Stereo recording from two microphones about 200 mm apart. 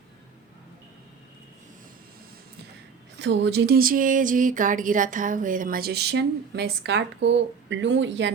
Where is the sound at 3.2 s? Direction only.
60° right (ahead or behind).